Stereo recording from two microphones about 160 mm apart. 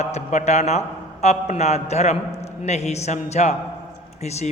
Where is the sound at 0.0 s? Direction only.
45° left (ahead or behind).